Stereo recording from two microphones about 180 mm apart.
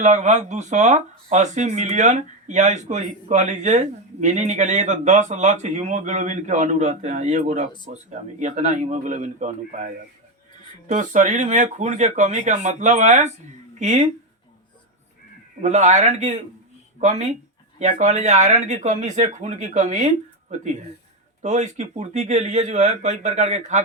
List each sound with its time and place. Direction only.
0.0 s a man's voice: 40° right (ahead or behind)
15.6 s speech: 40° right (ahead or behind)